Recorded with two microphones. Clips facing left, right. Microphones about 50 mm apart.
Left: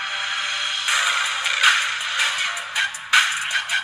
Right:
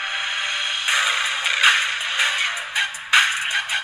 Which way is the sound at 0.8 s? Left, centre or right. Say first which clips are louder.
Even; centre.